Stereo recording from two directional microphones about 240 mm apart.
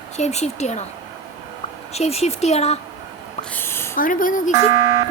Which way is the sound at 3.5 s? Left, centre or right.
Centre.